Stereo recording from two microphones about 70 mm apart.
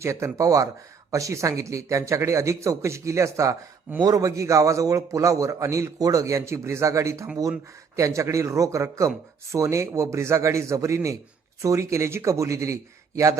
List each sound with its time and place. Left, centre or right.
0.0 s speech: right